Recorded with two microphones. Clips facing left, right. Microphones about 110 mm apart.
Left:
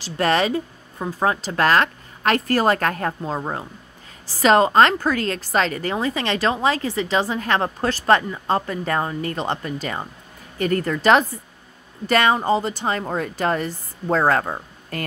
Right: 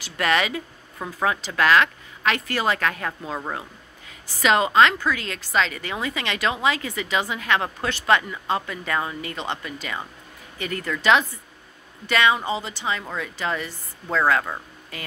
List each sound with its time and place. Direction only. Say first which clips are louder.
0.0 s a woman's voice: left 3 dB; 35° left (ahead or behind)
4.3 s a woman's voice: left 5 dB; 40° left (ahead or behind)